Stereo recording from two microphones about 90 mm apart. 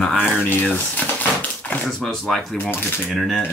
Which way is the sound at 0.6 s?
15° left (ahead or behind).